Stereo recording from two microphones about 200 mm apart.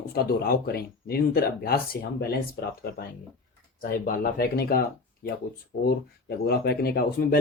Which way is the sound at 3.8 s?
45° left (ahead or behind).